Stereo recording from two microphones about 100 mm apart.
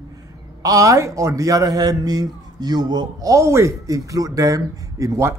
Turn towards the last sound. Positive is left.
turn(degrees=-30)  # may be behind; listen again after turning